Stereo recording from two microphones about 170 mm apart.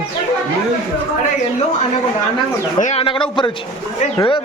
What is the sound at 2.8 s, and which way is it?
Speech, 35° left (ahead or behind).